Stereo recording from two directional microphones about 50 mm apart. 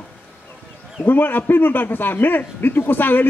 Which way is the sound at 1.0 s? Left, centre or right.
Left.